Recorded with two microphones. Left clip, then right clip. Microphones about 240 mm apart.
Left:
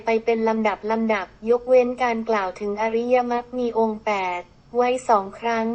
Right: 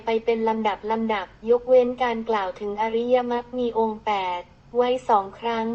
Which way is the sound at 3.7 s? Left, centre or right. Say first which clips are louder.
Left 2 dB; left.